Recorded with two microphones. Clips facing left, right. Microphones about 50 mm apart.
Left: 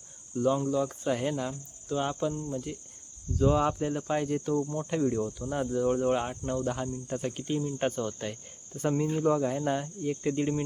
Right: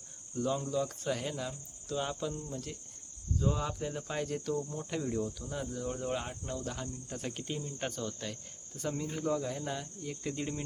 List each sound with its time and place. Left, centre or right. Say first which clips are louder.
0.3 s speech: left 6 dB; centre
3.3 s cricket: left 8 dB; left
3.8 s cricket: left 7 dB; centre
4.5 s speech: left 7 dB; left
4.8 s cricket: left 7 dB; centre
5.2 s speech: left 6 dB; left
6.0 s speech: left 9 dB; left
6.9 s cricket: left 7 dB; centre
7.8 s speech: left 7 dB; left